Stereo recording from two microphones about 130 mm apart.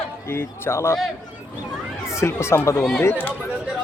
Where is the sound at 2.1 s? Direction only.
20° left (ahead or behind).